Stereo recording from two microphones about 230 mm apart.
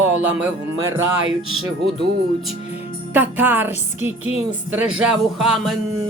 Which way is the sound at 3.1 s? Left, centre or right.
Centre.